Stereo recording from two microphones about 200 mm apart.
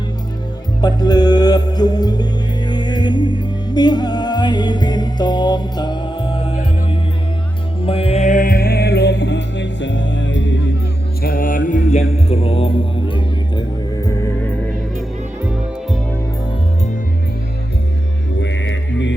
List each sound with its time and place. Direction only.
0.8 s music: 20° left (ahead or behind)
7.8 s music: 30° left (ahead or behind); by 10.6 s 65° left (ahead or behind)
11.2 s music: 45° left (ahead or behind); by 14.5 s 15° left (ahead or behind)
18.3 s music: 65° left (ahead or behind)